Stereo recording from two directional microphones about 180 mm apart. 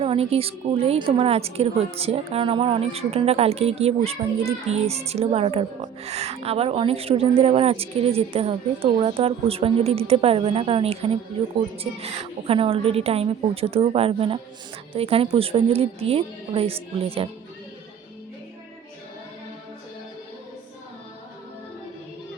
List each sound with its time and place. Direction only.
0.0 s speech: 35° right (ahead or behind)